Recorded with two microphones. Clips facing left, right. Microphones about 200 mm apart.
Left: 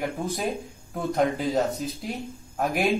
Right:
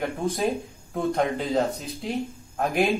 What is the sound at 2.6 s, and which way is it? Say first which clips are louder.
Speech: right 1 dB; centre (ahead or behind).